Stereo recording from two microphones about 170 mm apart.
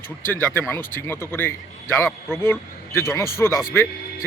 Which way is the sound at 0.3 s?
10° left (ahead or behind).